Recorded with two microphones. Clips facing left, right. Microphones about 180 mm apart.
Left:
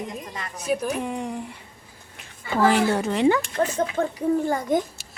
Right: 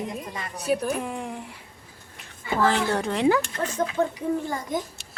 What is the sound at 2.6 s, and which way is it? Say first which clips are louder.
A woman's voice: left 4 dB; 10° left (ahead or behind).